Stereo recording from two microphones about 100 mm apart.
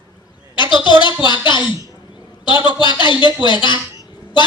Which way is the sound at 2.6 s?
55° left (ahead or behind).